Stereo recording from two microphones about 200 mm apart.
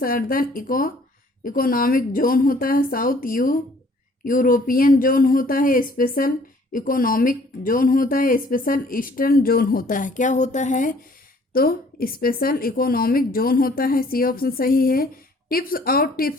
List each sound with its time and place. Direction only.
0.0 s a woman's voice: 45° left (ahead or behind)